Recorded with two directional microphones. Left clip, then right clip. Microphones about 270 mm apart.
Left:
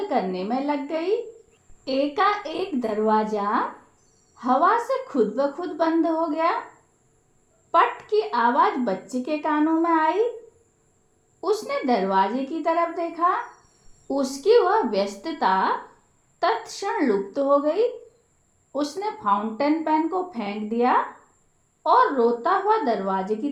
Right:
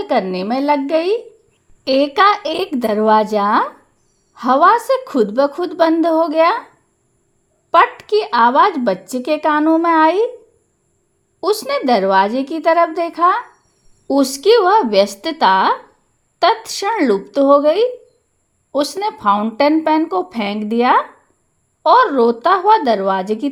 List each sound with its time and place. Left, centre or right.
0.1 s a woman's voice: right
7.7 s a woman's voice: right
11.3 s a woman's voice: right